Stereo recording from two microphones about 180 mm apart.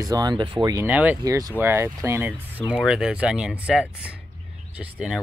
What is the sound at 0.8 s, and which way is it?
Speech, 10° right (ahead or behind).